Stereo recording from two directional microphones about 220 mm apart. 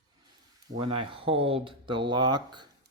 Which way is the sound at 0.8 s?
25° right (ahead or behind).